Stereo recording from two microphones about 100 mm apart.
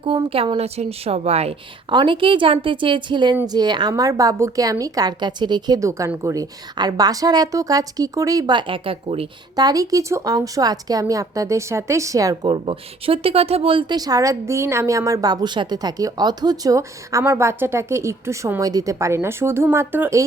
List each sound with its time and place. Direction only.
0.0 s a woman's voice: 65° right (ahead or behind)
0.5 s speech: 90° right
1.9 s a woman's voice: 55° right (ahead or behind)
5.8 s a woman's voice: 30° right (ahead or behind); by 9.2 s 70° right (ahead or behind)
9.6 s a woman's voice: 40° right (ahead or behind)
12.5 s speech: 60° right (ahead or behind)
13.9 s a woman's voice: 40° right (ahead or behind); by 20.1 s 20° right (ahead or behind)